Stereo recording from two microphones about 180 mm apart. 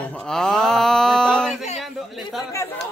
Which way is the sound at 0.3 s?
5° left (ahead or behind).